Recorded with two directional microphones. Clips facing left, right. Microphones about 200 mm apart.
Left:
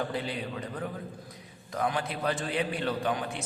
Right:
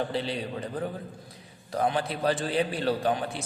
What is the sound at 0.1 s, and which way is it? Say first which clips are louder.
A man's voice: right 3 dB; 30° right (ahead or behind).